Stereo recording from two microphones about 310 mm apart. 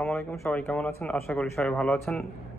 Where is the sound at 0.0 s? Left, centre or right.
Centre.